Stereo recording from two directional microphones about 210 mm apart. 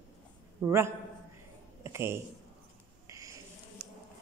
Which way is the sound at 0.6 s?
10° right (ahead or behind).